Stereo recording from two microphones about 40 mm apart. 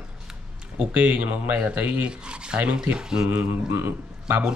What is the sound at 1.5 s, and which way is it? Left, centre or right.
Speech, right.